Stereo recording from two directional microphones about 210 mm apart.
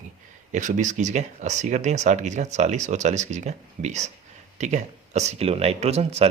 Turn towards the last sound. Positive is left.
turn(degrees=-30)  # may be behind; listen again after turning